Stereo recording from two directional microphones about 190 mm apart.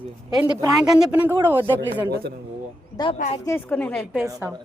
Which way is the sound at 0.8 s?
5° right (ahead or behind).